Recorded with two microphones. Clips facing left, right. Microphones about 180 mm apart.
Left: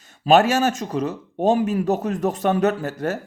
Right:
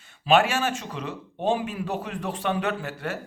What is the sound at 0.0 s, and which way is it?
Speech, 40° left (ahead or behind).